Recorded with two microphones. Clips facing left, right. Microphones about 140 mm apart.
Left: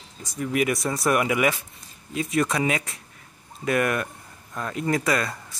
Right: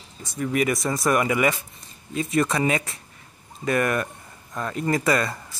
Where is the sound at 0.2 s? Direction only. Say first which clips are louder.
Right 1 dB; centre (ahead or behind).